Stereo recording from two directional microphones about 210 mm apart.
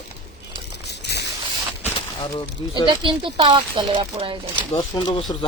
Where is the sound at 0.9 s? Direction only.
50° left (ahead or behind).